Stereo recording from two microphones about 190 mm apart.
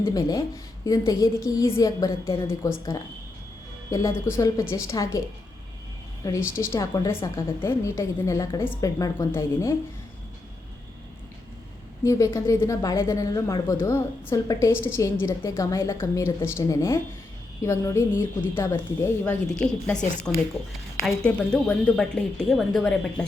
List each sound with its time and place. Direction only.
0.0 s a woman's voice: 20° left (ahead or behind)
6.2 s a woman's voice: 15° left (ahead or behind)
12.0 s a woman's voice: 15° left (ahead or behind)